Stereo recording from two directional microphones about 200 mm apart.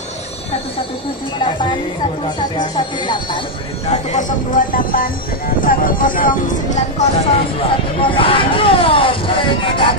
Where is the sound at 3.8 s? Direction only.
35° left (ahead or behind).